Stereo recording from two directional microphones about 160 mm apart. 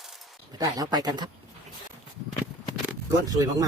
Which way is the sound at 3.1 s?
20° right (ahead or behind).